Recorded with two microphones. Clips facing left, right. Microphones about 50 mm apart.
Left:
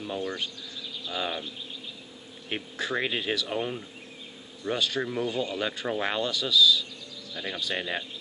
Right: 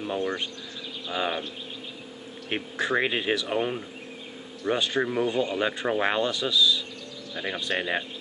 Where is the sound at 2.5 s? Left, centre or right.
Centre.